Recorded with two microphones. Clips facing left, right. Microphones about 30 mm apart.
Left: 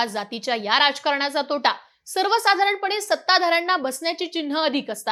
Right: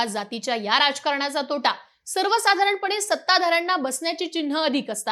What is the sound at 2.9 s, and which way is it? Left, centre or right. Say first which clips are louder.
A woman's voice: left 1 dB; centre.